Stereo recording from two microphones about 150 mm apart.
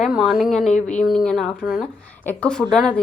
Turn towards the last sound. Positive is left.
turn(degrees=5)  # may be behind; listen again after turning